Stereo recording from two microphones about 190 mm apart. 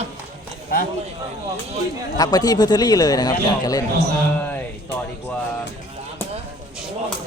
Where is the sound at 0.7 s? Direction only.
50° left (ahead or behind).